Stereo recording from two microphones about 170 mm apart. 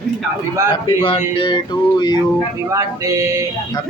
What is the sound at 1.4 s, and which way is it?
Speech, 30° left (ahead or behind).